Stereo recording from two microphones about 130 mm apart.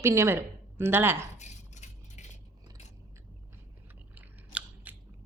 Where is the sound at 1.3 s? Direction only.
65° left (ahead or behind).